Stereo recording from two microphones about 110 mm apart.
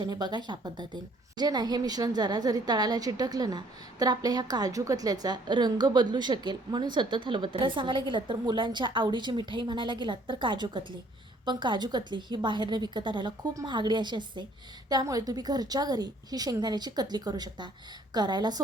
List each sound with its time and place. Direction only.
0.0 s a woman's voice: 40° right (ahead or behind)
13.5 s a woman's voice: 30° right (ahead or behind)
13.7 s a woman's voice: 45° right (ahead or behind)